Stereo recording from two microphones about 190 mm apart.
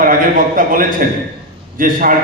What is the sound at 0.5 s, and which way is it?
A man's voice, 45° right (ahead or behind).